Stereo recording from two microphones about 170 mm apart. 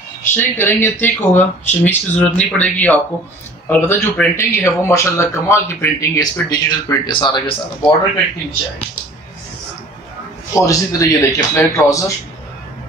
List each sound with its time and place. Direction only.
0.2 s speech: 15° left (ahead or behind)
10.5 s speech: 20° left (ahead or behind)